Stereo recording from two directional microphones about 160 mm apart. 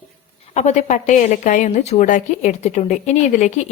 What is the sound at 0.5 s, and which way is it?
A woman's voice, 45° left (ahead or behind).